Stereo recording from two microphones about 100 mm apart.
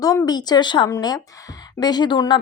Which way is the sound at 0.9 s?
40° left (ahead or behind).